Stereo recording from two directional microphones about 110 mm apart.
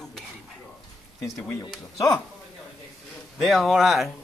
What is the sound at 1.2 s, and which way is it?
Speech, centre (ahead or behind).